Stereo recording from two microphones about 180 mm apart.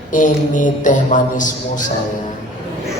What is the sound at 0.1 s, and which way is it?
A man's voice, 45° left (ahead or behind).